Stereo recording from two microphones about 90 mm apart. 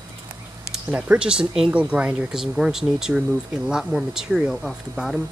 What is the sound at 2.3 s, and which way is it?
Speech, 5° right (ahead or behind).